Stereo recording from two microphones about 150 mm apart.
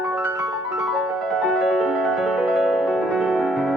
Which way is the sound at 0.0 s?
10° right (ahead or behind).